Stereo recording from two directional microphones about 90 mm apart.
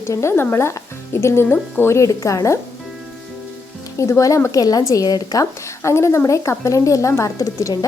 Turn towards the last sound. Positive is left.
turn(degrees=35)  # may be behind; listen again after turning